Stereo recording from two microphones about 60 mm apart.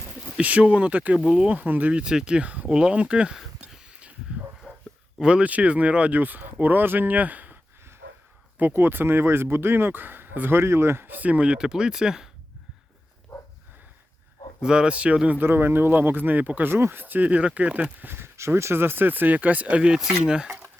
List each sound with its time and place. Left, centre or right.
0.3 s speech: right
1.2 s speech: centre
1.5 s speech: right
3.3 s a sound: centre
5.2 s speech: centre
8.7 s speech: right
11.2 s speech: right
14.6 s speech: centre
15.4 s speech: right
16.7 s speech: right
18.0 s speech: right; by 20.6 s centre